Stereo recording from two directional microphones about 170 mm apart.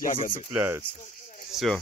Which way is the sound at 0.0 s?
50° left (ahead or behind).